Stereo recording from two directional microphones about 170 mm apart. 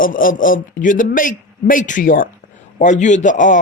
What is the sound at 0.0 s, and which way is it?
A man's voice, 55° left (ahead or behind).